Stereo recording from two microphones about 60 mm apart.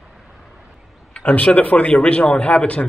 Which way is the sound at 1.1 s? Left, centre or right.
Left.